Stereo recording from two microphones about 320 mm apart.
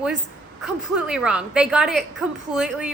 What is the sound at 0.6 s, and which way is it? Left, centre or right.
A woman's voice, centre.